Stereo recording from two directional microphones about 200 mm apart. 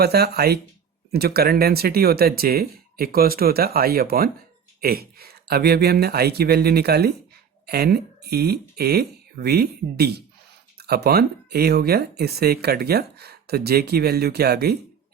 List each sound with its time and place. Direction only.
0.0 s speech: 50° right (ahead or behind)